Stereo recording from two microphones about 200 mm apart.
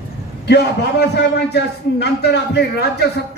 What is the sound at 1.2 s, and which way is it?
A man's voice, 55° left (ahead or behind).